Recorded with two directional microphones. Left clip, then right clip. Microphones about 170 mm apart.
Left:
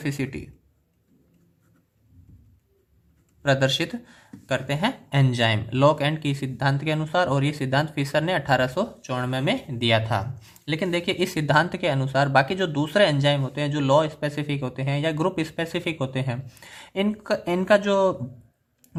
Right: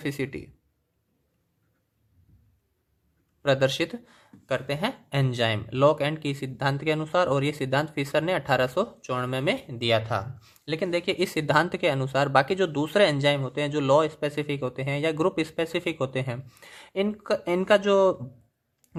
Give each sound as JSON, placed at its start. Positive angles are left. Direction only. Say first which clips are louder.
{"t": 0.0, "sound": "speech", "louder": "left 1 dB", "side_deg": -25}
{"t": 3.4, "sound": "speech", "louder": "left 1 dB", "side_deg": -25}